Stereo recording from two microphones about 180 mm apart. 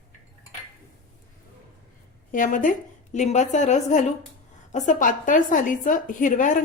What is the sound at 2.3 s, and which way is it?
A woman's voice, 45° left (ahead or behind).